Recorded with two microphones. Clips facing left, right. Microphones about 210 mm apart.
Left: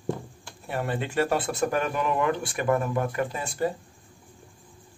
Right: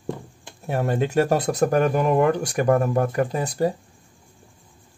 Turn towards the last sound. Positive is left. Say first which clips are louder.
# right 5 dB
turn(degrees=-40)  # may be behind; listen again after turning